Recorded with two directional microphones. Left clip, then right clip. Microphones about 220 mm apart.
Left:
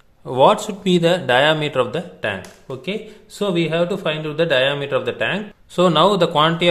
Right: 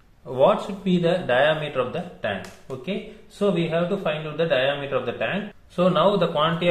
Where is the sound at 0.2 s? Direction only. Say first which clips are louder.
Left 5 dB; 45° left (ahead or behind).